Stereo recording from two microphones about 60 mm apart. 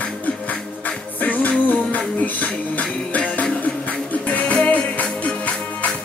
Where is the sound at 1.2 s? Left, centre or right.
Left.